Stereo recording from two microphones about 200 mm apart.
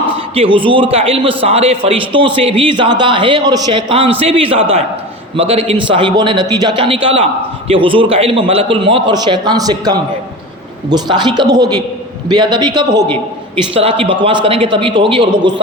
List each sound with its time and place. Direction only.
0.3 s a man's voice: 25° right (ahead or behind)